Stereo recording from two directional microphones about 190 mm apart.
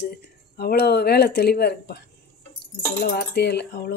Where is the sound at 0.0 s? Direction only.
55° left (ahead or behind).